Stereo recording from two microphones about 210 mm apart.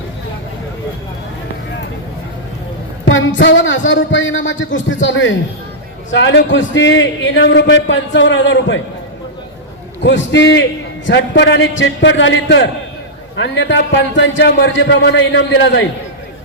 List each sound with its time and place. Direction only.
3.1 s a man's voice: 65° left (ahead or behind)
10.0 s a man's voice: 60° left (ahead or behind)